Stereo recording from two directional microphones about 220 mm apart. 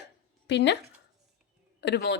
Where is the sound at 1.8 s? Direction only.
50° left (ahead or behind).